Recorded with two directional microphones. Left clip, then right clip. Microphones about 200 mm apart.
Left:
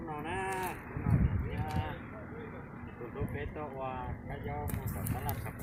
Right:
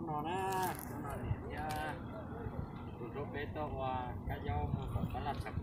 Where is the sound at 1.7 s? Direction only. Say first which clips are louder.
Even; 10° right (ahead or behind).